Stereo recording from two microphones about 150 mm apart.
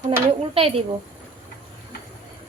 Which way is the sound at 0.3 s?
40° right (ahead or behind).